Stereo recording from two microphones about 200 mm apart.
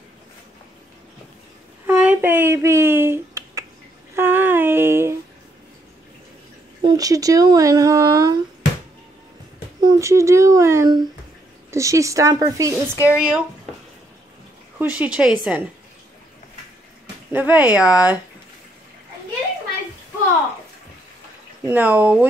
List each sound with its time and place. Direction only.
1.9 s a sound: 10° right (ahead or behind)
6.8 s speech: 20° right (ahead or behind)
9.8 s speech: 15° right (ahead or behind)
14.8 s speech: 5° right (ahead or behind)
17.3 s speech: 10° right (ahead or behind)
21.6 s speech: 10° right (ahead or behind)